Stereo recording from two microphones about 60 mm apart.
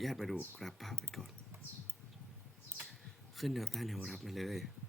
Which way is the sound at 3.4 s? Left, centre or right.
Centre.